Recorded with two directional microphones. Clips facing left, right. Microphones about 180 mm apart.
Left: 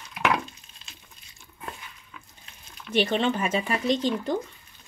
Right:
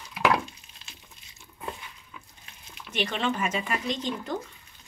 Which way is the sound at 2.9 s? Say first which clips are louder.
Left 5 dB; 35° left (ahead or behind).